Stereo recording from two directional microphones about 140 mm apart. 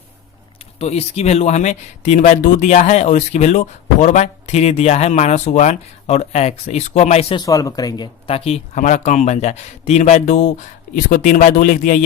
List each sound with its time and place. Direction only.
0.8 s speech: 50° left (ahead or behind)
7.3 s speech: 25° left (ahead or behind)
8.3 s speech: 45° left (ahead or behind)
10.9 s speech: 70° left (ahead or behind)